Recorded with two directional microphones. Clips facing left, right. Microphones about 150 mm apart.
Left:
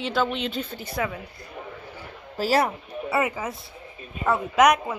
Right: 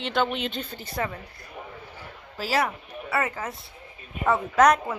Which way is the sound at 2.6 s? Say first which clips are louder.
Left 3 dB; 20° left (ahead or behind).